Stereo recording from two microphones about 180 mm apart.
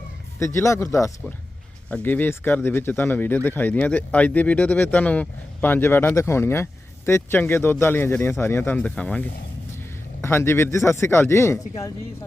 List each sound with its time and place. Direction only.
0.3 s speech: 15° left (ahead or behind)